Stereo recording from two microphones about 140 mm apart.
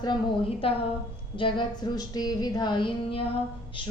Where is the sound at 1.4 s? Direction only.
35° left (ahead or behind).